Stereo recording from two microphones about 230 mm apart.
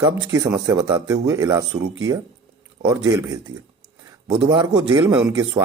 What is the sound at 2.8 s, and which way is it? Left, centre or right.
Speech, centre.